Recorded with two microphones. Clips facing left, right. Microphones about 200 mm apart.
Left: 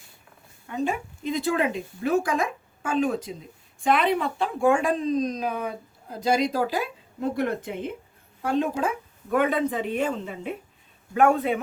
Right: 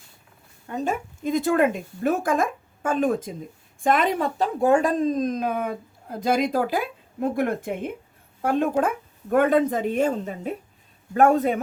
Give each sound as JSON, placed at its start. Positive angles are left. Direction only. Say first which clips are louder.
{"t": 0.7, "sound": "speech", "louder": "right 1 dB", "side_deg": -45}